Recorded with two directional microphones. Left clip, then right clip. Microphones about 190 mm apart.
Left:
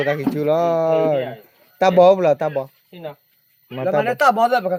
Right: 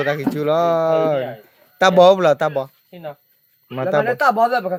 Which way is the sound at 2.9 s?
30° right (ahead or behind).